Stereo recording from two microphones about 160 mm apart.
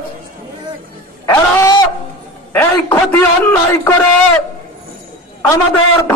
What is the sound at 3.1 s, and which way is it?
Speech, 10° left (ahead or behind).